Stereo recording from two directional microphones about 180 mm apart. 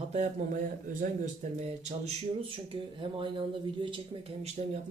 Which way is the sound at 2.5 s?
30° right (ahead or behind).